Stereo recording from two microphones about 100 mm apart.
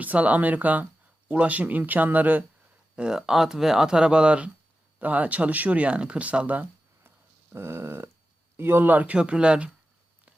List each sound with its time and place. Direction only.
0.0 s speech: 15° right (ahead or behind)
7.5 s a sound: 25° right (ahead or behind)
8.5 s speech: 20° right (ahead or behind)